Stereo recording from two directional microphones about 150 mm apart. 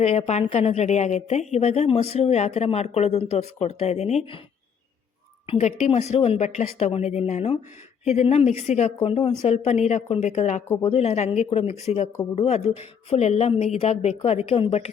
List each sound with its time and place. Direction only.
0.0 s a woman's voice: 45° left (ahead or behind)
5.5 s a woman's voice: 45° left (ahead or behind)